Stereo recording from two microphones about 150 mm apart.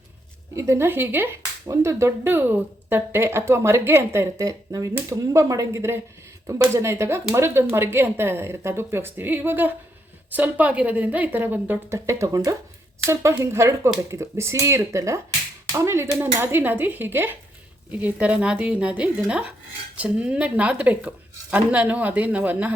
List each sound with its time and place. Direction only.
0.5 s speech: 20° right (ahead or behind)